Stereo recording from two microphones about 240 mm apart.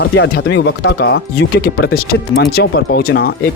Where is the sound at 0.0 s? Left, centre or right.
Left.